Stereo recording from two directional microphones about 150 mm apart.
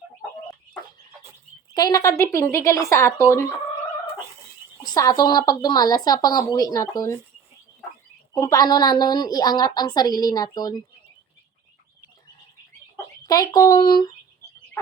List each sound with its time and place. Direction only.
1.7 s a woman's voice: 25° left (ahead or behind)
4.8 s a woman's voice: 25° left (ahead or behind)
8.4 s a woman's voice: 20° left (ahead or behind)
13.2 s a woman's voice: 25° left (ahead or behind)